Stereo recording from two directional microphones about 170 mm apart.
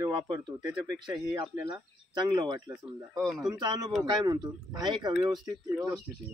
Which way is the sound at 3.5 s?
25° right (ahead or behind).